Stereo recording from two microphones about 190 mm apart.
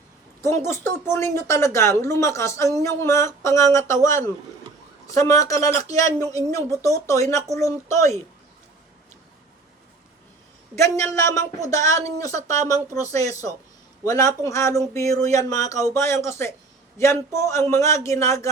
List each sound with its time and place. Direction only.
0.4 s speech: 15° left (ahead or behind)
10.8 s speech: 15° left (ahead or behind)